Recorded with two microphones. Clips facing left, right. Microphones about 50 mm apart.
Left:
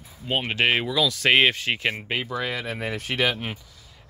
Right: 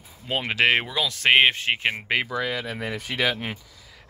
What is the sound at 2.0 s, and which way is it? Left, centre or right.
Speech, right.